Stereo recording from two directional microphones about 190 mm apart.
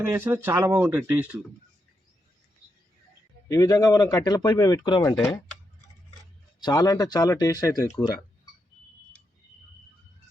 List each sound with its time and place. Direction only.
0.1 s speech: 10° right (ahead or behind)
3.5 s speech: 15° left (ahead or behind)
6.6 s speech: 20° left (ahead or behind)